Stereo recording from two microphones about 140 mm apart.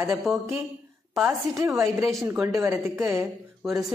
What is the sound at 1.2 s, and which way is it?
Speech, 20° right (ahead or behind).